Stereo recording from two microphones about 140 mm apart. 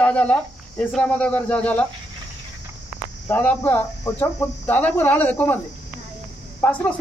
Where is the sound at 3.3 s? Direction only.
15° left (ahead or behind).